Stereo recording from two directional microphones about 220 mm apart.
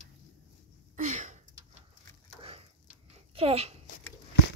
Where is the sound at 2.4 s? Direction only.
25° right (ahead or behind).